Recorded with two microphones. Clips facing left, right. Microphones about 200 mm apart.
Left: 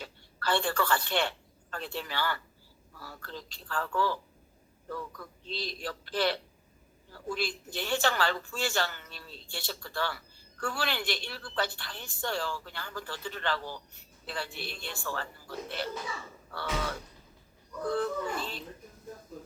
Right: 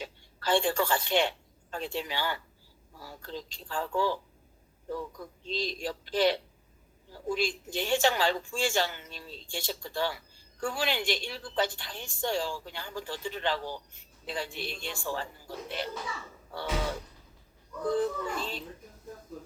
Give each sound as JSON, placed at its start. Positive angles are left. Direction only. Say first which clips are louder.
{"t": 0.0, "sound": "a woman's voice", "louder": "even", "side_deg": -15}